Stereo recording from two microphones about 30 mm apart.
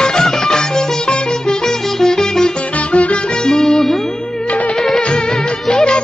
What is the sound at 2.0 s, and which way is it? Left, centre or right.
Music, centre.